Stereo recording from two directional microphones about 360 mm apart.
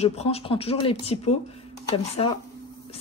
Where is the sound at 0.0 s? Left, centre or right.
Centre.